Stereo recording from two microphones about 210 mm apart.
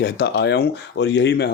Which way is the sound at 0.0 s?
55° left (ahead or behind).